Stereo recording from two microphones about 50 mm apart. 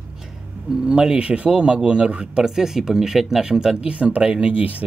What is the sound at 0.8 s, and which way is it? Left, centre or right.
Speech, centre.